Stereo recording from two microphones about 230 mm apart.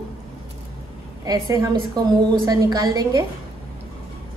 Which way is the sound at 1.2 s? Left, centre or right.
Centre.